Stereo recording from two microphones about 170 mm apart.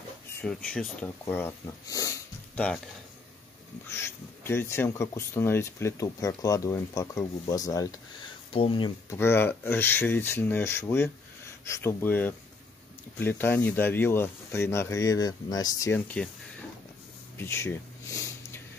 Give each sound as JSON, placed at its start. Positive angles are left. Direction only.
{"t": 0.7, "sound": "speech", "side_deg": 5}
{"t": 1.3, "sound": "speech", "side_deg": 15}
{"t": 2.5, "sound": "speech", "side_deg": 5}
{"t": 3.9, "sound": "speech", "side_deg": 15}
{"t": 8.5, "sound": "speech", "side_deg": 30}
{"t": 9.1, "sound": "speech", "side_deg": 15}
{"t": 17.4, "sound": "a sound", "side_deg": 15}